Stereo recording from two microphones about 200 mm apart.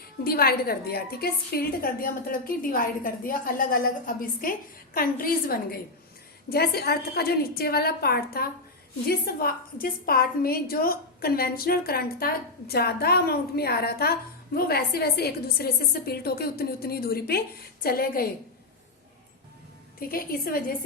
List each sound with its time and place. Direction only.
0.3 s a woman's voice: 50° left (ahead or behind)
20.0 s a woman's voice: 45° left (ahead or behind)